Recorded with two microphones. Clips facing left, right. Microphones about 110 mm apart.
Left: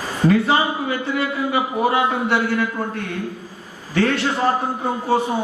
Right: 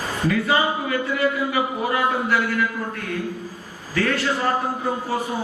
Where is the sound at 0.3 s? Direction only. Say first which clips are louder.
Left 4 dB; 30° left (ahead or behind).